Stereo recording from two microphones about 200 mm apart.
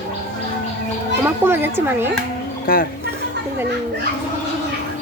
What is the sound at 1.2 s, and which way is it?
Speech, 10° right (ahead or behind).